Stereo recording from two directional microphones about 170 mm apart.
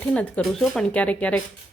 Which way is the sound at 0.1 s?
5° left (ahead or behind).